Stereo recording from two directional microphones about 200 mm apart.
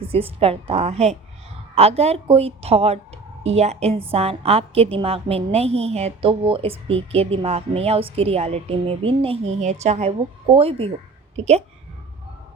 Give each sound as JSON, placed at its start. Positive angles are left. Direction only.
{"t": 0.0, "sound": "a woman's voice", "side_deg": -30}